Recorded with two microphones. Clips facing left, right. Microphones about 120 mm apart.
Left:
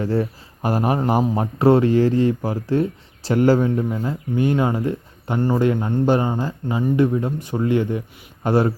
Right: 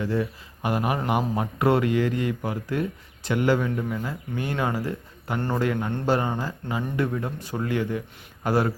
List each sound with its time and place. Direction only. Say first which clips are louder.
0.0 s a man's voice: left 4 dB; 40° left (ahead or behind)
3.8 s speech: left 6 dB; 25° left (ahead or behind)
5.4 s speech: left 7 dB; 10° left (ahead or behind)
5.6 s speech: left 4 dB; 25° left (ahead or behind)